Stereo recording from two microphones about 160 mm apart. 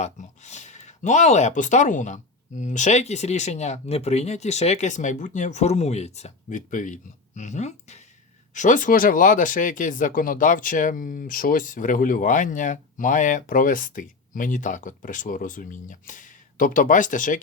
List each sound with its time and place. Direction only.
0.0 s speech: 45° left (ahead or behind)